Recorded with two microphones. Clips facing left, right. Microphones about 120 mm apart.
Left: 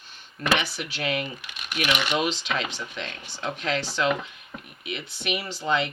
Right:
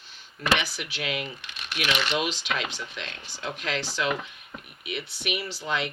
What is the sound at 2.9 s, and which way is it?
Speech, 45° left (ahead or behind).